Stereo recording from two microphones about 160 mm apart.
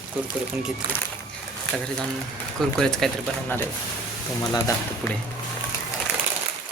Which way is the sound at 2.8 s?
5° left (ahead or behind).